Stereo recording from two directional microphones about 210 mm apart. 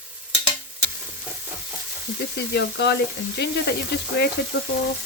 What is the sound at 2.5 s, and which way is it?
Sizzle, 50° left (ahead or behind).